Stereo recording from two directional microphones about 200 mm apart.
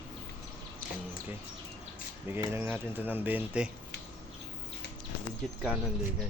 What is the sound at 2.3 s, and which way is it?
Speech, 10° right (ahead or behind).